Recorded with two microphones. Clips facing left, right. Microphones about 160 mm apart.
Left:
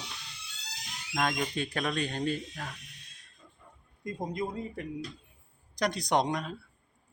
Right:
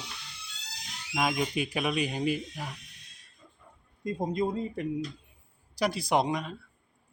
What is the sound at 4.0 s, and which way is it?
Speech, 25° right (ahead or behind).